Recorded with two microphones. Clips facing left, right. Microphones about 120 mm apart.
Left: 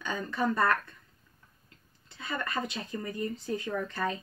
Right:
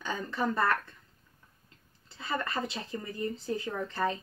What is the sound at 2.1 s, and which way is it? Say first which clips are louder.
Speech: right 1 dB; 30° right (ahead or behind).